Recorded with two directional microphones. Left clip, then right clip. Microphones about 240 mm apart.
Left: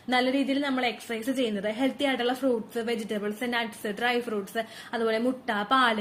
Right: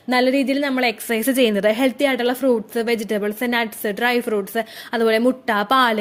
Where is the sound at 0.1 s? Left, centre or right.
Right.